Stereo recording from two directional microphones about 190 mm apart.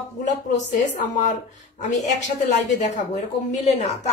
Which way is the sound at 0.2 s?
40° left (ahead or behind).